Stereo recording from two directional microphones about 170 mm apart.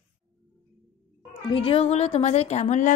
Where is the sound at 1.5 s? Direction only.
35° left (ahead or behind).